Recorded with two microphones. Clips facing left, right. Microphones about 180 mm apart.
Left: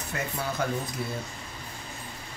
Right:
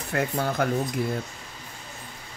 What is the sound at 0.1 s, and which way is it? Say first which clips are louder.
Speech: right 7 dB; 55° right (ahead or behind).